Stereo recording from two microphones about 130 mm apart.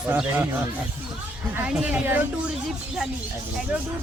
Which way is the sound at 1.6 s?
5° right (ahead or behind).